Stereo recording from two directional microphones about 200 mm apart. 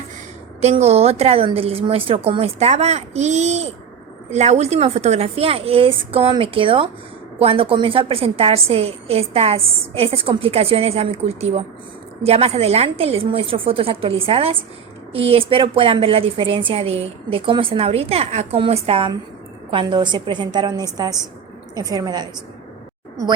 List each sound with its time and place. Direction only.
0.6 s a woman's voice: 30° right (ahead or behind)